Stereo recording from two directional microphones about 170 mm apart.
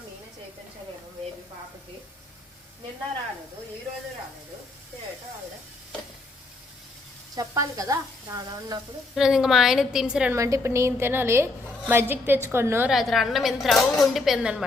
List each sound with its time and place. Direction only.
7.3 s speech: 20° right (ahead or behind)
9.1 s a woman's voice: 5° right (ahead or behind)
10.3 s a woman's voice: 20° right (ahead or behind)
12.9 s a woman's voice: centre (ahead or behind)